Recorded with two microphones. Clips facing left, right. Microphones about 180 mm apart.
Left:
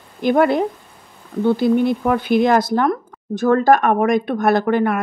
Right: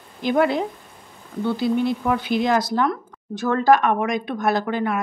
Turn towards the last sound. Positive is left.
turn(degrees=60)  # may be behind; listen again after turning